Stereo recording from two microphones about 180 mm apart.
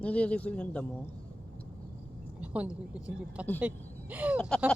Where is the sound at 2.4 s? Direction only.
5° right (ahead or behind).